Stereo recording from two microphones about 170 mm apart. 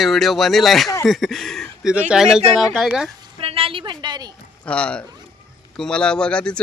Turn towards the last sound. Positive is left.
turn(degrees=5)  # may be behind; listen again after turning